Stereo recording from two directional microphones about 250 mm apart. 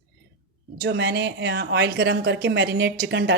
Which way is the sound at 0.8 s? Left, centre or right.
Right.